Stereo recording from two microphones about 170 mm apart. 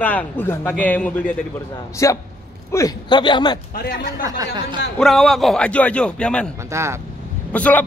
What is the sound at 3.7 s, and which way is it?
Speech, 60° left (ahead or behind).